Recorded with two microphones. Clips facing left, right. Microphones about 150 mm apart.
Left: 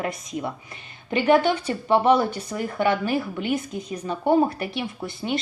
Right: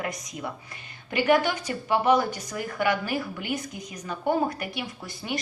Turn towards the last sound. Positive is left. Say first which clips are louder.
# left 6 dB
turn(degrees=25)  # may be behind; listen again after turning